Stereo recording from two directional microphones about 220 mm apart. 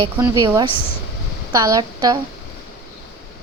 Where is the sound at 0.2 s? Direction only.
15° right (ahead or behind).